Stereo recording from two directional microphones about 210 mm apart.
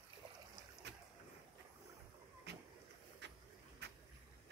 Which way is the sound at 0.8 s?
55° right (ahead or behind).